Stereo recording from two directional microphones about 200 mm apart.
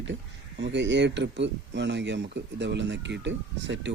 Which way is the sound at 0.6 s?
60° right (ahead or behind).